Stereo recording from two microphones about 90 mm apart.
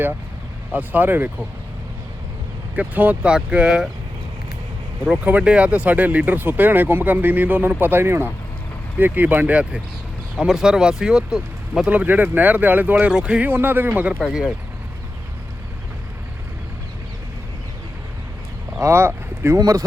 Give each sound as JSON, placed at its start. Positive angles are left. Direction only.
{"t": 0.7, "sound": "speech", "side_deg": -20}
{"t": 2.7, "sound": "speech", "side_deg": -15}
{"t": 5.0, "sound": "speech", "side_deg": -15}
{"t": 10.3, "sound": "speech", "side_deg": -5}
{"t": 11.9, "sound": "speech", "side_deg": -15}
{"t": 13.5, "sound": "speech", "side_deg": -20}
{"t": 14.2, "sound": "speech", "side_deg": -5}
{"t": 18.8, "sound": "speech", "side_deg": -30}
{"t": 19.5, "sound": "speech", "side_deg": -40}